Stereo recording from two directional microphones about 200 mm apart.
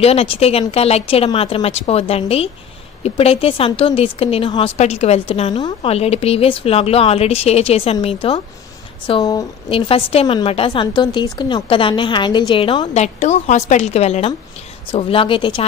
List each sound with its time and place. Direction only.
0.0 s a woman's voice: 30° left (ahead or behind)